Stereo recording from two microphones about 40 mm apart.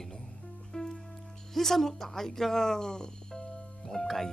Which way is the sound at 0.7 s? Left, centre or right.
Centre.